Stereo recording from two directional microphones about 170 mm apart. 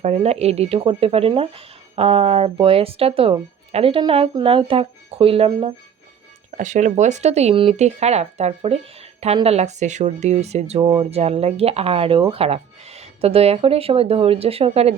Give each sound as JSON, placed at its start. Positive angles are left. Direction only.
{"t": 0.0, "sound": "speech", "side_deg": -40}
{"t": 6.6, "sound": "speech", "side_deg": -45}